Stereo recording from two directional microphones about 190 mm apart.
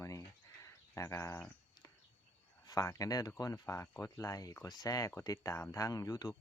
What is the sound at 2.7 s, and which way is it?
Speech, 15° left (ahead or behind).